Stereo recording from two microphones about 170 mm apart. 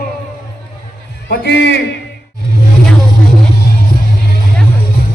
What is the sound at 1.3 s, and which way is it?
Speech, 75° left (ahead or behind).